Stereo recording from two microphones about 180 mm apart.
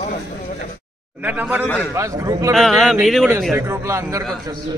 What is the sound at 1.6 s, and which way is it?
Speech, 10° left (ahead or behind).